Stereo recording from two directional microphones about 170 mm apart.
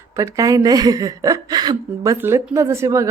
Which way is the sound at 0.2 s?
20° right (ahead or behind).